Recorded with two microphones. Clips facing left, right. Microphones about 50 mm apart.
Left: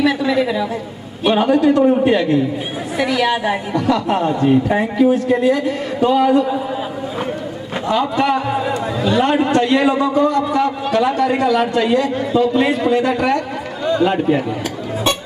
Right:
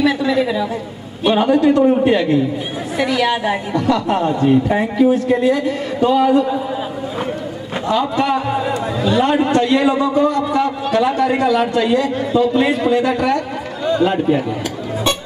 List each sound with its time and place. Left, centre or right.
0.0 s a woman's voice: centre
7.8 s a man's voice: centre
8.4 s a woman's voice: centre
9.6 s a man's voice: centre
10.1 s a woman's voice: centre
11.5 s a man's voice: centre